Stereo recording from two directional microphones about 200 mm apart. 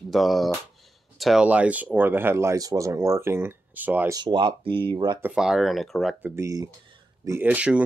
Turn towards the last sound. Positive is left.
turn(degrees=-5)  # may be behind; listen again after turning